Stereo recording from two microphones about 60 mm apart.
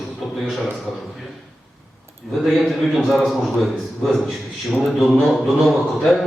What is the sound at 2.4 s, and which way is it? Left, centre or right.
A man's voice, centre.